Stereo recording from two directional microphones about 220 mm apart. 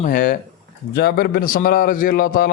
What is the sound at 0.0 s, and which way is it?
A man's voice, 40° left (ahead or behind).